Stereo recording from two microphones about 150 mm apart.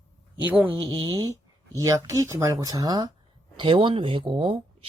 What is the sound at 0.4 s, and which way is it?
Speech, 10° right (ahead or behind).